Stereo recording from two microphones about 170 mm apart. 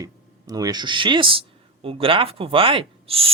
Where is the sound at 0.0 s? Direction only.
20° right (ahead or behind).